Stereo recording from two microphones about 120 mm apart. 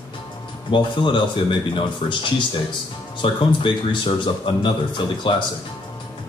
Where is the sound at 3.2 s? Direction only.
40° left (ahead or behind).